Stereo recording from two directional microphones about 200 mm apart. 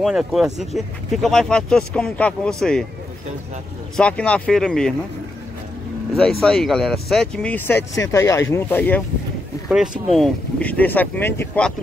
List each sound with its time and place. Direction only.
0.0 s speech: centre (ahead or behind)
3.9 s speech: 5° left (ahead or behind)
6.4 s speech: centre (ahead or behind)
10.1 s speech: 5° left (ahead or behind)